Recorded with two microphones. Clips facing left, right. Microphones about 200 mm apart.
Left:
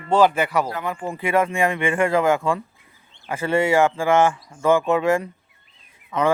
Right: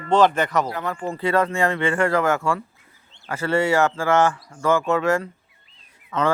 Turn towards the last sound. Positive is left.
turn(degrees=15)  # may be behind; listen again after turning